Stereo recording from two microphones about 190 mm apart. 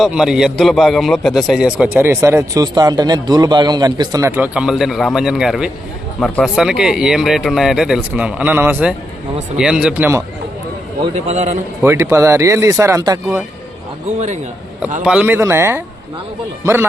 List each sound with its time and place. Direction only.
0.0 s a man's voice: 5° right (ahead or behind)
6.1 s speech: 10° left (ahead or behind)
6.4 s a man's voice: 5° right (ahead or behind)
11.3 s a man's voice: 40° right (ahead or behind)
11.8 s speech: 15° right (ahead or behind)
15.0 s speech: 5° right (ahead or behind)